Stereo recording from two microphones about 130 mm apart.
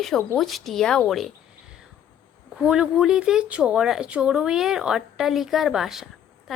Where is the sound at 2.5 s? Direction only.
5° right (ahead or behind).